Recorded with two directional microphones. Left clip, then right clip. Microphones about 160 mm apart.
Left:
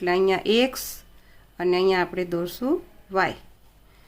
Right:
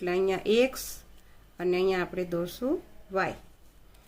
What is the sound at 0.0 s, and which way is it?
Speech, 40° left (ahead or behind).